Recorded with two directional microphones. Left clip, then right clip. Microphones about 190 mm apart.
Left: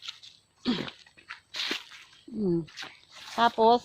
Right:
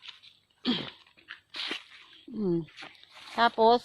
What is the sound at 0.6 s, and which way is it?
Speech, 45° right (ahead or behind).